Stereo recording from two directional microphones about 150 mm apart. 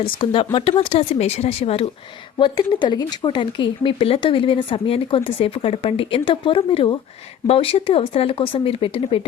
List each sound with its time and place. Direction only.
0.0 s speech: 35° left (ahead or behind)